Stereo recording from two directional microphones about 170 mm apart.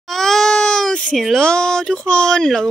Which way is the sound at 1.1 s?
Centre (ahead or behind).